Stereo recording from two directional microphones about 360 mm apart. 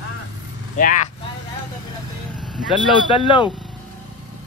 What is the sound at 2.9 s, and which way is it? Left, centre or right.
Speech, centre.